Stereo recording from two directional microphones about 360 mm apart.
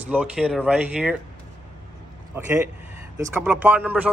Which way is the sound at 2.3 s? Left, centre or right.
Centre.